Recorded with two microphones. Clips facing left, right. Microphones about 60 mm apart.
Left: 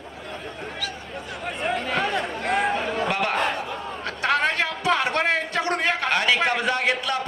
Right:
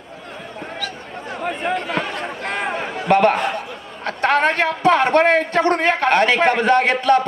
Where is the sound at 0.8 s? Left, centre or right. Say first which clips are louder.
Right 3 dB; right.